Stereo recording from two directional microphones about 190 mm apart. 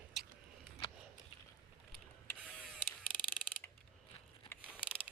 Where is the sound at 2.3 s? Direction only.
10° left (ahead or behind).